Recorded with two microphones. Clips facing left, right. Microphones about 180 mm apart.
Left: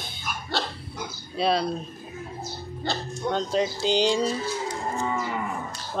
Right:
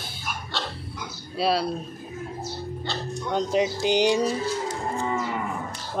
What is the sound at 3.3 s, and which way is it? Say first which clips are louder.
Speech: right 2 dB; 15° right (ahead or behind).